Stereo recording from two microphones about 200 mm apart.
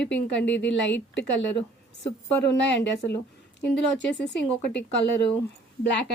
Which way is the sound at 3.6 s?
60° left (ahead or behind).